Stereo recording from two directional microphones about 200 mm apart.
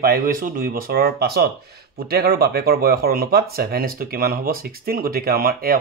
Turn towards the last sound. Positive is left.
turn(degrees=-45)  # may be behind; listen again after turning